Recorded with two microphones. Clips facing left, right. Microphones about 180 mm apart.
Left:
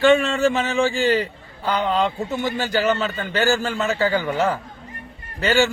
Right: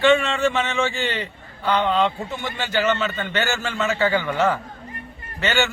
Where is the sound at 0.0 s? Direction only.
35° left (ahead or behind).